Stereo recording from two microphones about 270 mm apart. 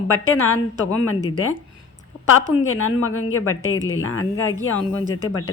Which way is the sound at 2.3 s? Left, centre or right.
Left.